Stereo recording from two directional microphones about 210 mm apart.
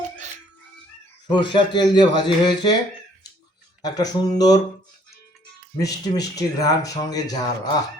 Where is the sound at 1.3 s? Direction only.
20° left (ahead or behind).